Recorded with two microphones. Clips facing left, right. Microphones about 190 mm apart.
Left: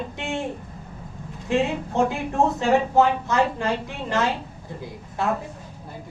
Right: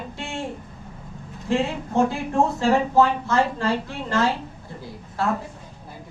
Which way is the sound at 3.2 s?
15° left (ahead or behind).